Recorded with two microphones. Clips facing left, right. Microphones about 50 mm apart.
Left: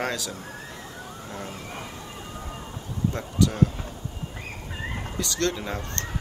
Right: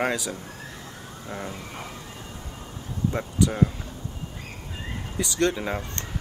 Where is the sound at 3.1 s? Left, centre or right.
Centre.